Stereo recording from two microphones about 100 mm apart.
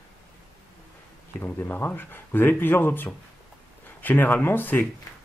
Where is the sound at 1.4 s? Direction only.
20° left (ahead or behind).